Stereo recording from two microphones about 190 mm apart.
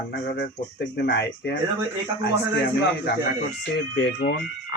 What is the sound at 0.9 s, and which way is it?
Speech, 65° left (ahead or behind).